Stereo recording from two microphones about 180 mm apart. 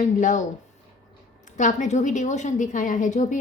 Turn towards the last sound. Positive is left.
turn(degrees=45)  # may be behind; listen again after turning